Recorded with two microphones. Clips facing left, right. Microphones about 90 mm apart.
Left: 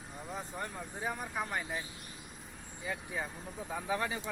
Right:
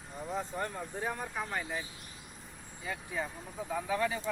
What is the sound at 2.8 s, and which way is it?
Speech, 10° left (ahead or behind).